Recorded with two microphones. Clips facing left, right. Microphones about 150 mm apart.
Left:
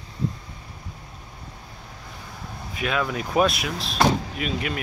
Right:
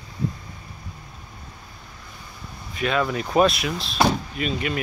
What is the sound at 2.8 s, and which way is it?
Speech, 5° left (ahead or behind).